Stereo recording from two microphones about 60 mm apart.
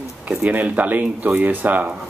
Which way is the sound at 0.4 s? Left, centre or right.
Right.